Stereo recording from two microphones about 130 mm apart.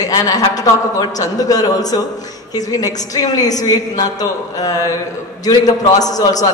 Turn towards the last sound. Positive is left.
turn(degrees=30)  # may be behind; listen again after turning